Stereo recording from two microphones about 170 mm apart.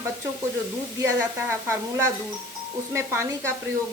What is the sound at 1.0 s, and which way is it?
A woman's voice, 15° right (ahead or behind).